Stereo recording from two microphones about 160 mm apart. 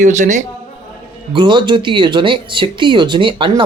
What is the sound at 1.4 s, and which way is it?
Speech, 30° right (ahead or behind).